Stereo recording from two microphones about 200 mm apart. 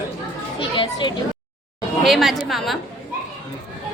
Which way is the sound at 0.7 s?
25° left (ahead or behind).